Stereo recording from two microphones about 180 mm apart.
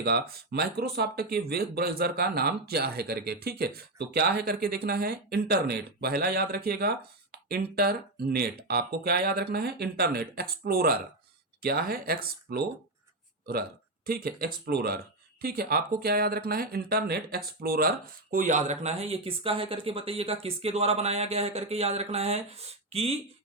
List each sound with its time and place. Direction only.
0.0 s speech: 60° right (ahead or behind)
14.1 s speech: 60° right (ahead or behind); by 23.1 s 35° right (ahead or behind)